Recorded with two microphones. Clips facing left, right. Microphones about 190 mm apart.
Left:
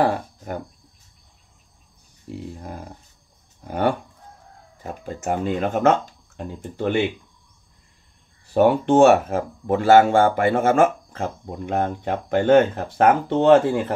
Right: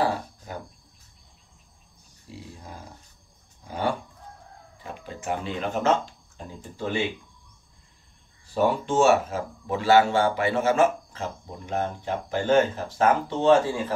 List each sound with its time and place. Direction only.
2.2 s speech: 55° left (ahead or behind)
4.8 s speech: 45° left (ahead or behind); by 7.0 s 65° left (ahead or behind)
8.5 s speech: 60° left (ahead or behind)